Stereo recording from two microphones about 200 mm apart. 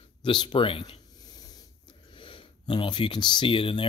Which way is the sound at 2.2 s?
25° left (ahead or behind).